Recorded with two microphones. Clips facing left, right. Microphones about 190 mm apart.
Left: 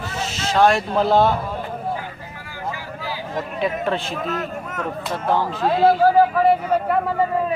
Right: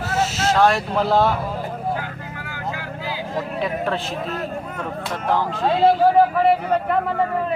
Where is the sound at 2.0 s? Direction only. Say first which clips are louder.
Right 3 dB; 70° right (ahead or behind).